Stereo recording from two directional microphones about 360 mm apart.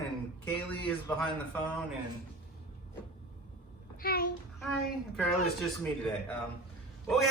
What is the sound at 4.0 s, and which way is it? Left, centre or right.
Speech, left.